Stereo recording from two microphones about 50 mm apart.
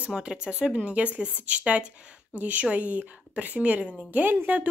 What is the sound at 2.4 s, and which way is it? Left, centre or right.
A woman's voice, right.